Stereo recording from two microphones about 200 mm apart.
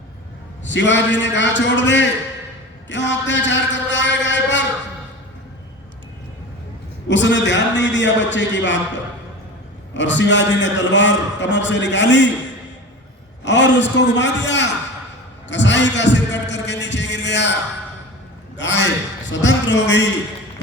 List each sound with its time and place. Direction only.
0.7 s a man's voice: 65° left (ahead or behind)
7.1 s a man's voice: 65° left (ahead or behind)
9.9 s a man's voice: 65° left (ahead or behind)
13.4 s a man's voice: 60° left (ahead or behind)
18.5 s a man's voice: 60° left (ahead or behind)